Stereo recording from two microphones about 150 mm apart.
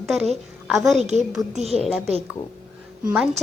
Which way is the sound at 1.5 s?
45° right (ahead or behind).